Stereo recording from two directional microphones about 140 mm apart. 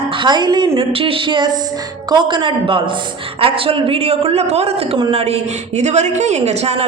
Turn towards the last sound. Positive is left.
turn(degrees=-50)  # may be behind; listen again after turning